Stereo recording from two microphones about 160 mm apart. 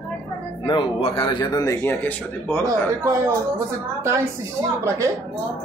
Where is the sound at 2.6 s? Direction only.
20° right (ahead or behind).